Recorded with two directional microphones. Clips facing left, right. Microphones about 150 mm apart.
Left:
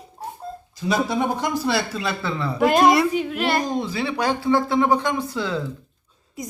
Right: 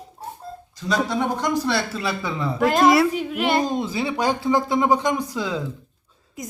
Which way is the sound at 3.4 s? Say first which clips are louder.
Right 5 dB; 25° right (ahead or behind).